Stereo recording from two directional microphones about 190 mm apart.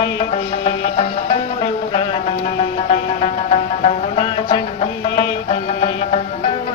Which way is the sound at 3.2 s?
30° left (ahead or behind).